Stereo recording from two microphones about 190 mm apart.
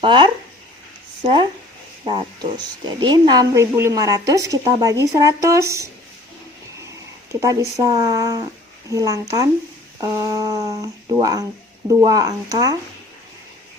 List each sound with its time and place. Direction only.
0.0 s speech: 25° right (ahead or behind)
7.8 s speech: 20° right (ahead or behind)